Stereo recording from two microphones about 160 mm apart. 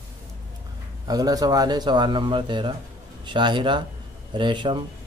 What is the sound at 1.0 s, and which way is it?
Speech, 25° right (ahead or behind).